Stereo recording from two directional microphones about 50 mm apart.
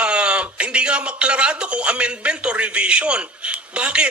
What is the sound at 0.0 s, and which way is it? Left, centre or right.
Speech, right.